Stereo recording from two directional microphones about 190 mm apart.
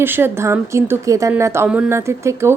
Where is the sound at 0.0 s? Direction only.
10° right (ahead or behind).